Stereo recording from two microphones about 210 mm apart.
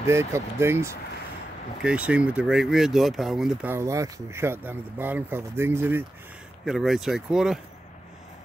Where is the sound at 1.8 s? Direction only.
5° right (ahead or behind).